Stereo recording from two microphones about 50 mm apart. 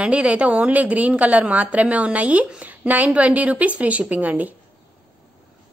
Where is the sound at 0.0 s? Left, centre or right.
Right.